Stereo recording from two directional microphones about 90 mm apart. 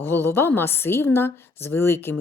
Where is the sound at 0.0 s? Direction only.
25° left (ahead or behind).